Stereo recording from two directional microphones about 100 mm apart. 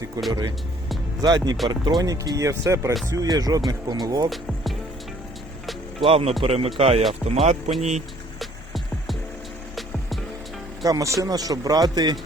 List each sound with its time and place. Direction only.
0.2 s speech: 35° right (ahead or behind)
4.3 s speech: centre (ahead or behind)
6.0 s speech: 75° right (ahead or behind)
6.4 s speech: 90° right
8.4 s music: centre (ahead or behind)
10.8 s speech: 35° right (ahead or behind)